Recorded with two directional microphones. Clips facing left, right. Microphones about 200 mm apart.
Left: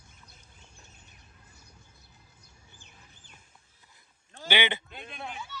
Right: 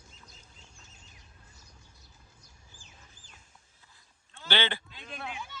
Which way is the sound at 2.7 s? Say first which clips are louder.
Even; 60° left (ahead or behind).